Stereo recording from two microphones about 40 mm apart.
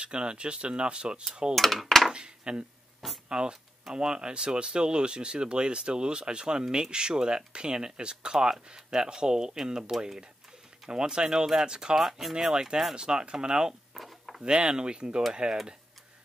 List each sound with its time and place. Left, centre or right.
0.0 s speech: right
1.5 s speech: centre
2.1 s a sound: right
3.3 s speech: right
10.9 s speech: right
12.0 s speech: centre
13.9 s a sound: centre
14.4 s speech: right